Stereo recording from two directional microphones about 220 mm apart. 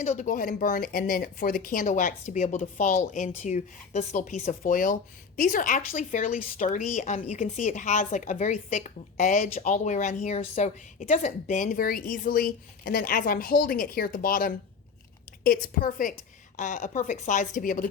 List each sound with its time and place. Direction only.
0.0 s a woman's voice: 30° left (ahead or behind)